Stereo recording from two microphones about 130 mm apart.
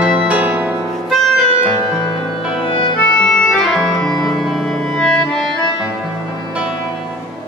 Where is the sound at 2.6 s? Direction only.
45° left (ahead or behind).